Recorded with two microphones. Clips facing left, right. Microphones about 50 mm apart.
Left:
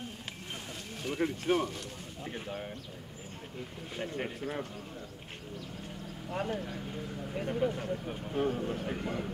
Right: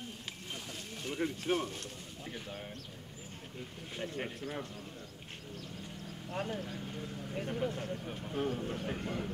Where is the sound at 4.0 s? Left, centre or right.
Centre.